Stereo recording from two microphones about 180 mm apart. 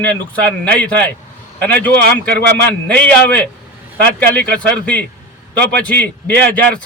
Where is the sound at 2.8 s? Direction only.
5° left (ahead or behind).